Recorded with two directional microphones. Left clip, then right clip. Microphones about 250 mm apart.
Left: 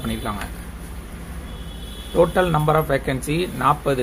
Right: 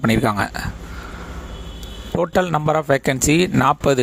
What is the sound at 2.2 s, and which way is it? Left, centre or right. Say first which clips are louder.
Speech: even; right.